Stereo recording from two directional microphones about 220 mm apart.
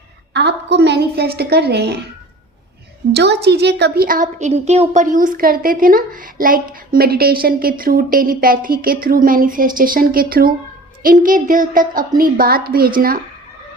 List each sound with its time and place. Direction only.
0.3 s a woman's voice: 50° right (ahead or behind)
3.1 s a woman's voice: 50° right (ahead or behind)